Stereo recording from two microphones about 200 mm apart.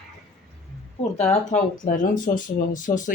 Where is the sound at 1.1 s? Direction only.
35° left (ahead or behind).